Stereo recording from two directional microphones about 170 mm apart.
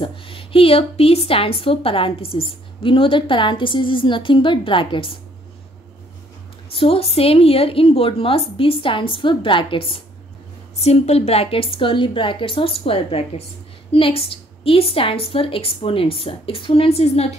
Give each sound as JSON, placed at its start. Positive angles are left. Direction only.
{"t": 0.0, "sound": "a woman's voice", "side_deg": 30}
{"t": 6.7, "sound": "a woman's voice", "side_deg": 35}